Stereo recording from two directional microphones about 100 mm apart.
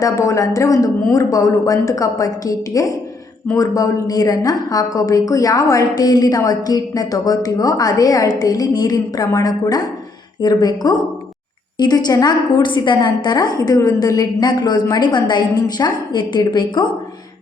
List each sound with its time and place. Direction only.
0.0 s a woman's voice: 35° left (ahead or behind); by 16.9 s 50° left (ahead or behind)